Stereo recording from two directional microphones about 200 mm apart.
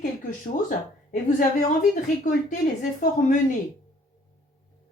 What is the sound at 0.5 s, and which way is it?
Speech, 40° left (ahead or behind).